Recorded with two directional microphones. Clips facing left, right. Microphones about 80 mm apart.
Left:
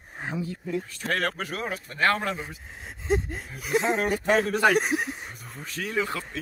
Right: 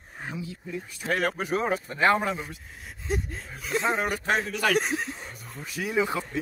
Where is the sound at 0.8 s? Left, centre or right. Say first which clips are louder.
Right 5 dB; centre.